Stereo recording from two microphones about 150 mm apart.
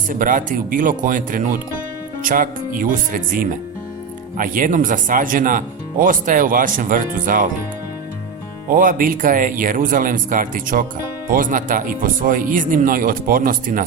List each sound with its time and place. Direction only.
0.1 s speech: 60° right (ahead or behind)
8.7 s speech: 65° right (ahead or behind)